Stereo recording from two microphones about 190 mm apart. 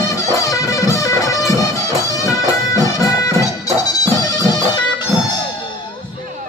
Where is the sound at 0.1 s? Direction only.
15° left (ahead or behind).